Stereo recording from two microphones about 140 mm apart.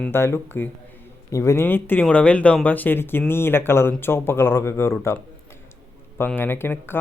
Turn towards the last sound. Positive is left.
turn(degrees=15)  # may be behind; listen again after turning